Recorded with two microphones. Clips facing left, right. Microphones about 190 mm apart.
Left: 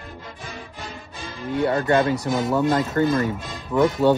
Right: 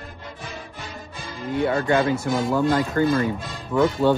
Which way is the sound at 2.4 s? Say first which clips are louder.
Even; 20° left (ahead or behind).